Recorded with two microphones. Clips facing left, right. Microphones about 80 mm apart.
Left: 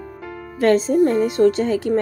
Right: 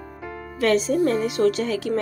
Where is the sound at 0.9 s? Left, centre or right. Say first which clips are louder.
Left 4 dB; centre.